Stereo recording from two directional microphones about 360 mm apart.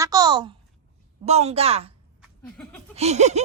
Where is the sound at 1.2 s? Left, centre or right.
Centre.